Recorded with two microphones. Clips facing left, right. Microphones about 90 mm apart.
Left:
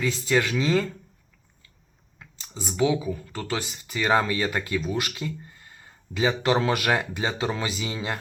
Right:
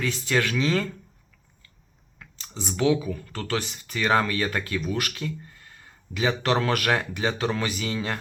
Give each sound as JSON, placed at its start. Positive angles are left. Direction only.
{"t": 0.4, "sound": "speech", "side_deg": 20}
{"t": 2.5, "sound": "speech", "side_deg": 0}
{"t": 2.7, "sound": "speech", "side_deg": 15}